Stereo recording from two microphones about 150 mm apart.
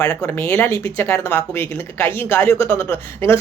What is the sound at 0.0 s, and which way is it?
Speech, 10° left (ahead or behind).